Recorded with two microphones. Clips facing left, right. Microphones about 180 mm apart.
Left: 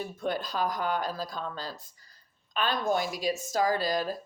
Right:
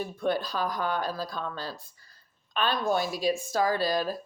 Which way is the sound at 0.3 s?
20° left (ahead or behind).